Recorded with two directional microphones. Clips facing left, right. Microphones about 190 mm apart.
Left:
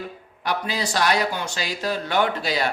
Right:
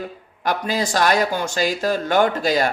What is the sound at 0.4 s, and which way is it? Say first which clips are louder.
Mantra: right 4 dB; 45° right (ahead or behind).